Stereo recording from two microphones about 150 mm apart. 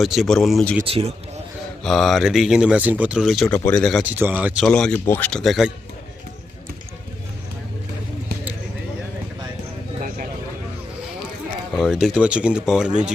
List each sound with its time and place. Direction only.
0.0 s speech: centre (ahead or behind)
0.9 s a man's voice: 40° right (ahead or behind)
1.8 s speech: centre (ahead or behind)
4.1 s speech: 10° right (ahead or behind)
4.6 s speech: 5° left (ahead or behind)
11.8 s speech: centre (ahead or behind)